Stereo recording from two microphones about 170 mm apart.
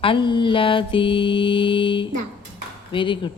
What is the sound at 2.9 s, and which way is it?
Speech, 30° left (ahead or behind).